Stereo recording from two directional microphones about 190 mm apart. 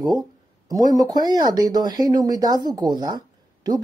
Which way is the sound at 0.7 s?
20° right (ahead or behind).